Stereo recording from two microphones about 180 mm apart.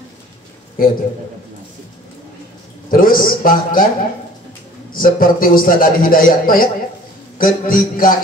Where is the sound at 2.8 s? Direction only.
50° left (ahead or behind).